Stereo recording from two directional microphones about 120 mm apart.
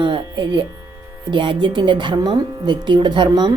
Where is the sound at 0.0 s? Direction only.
40° right (ahead or behind).